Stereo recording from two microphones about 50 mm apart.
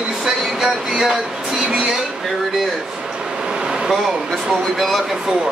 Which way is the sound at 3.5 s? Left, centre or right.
Centre.